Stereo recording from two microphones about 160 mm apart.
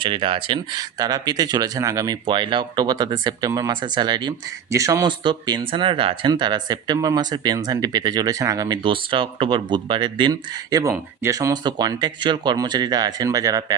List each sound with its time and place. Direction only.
0.0 s speech: 30° right (ahead or behind)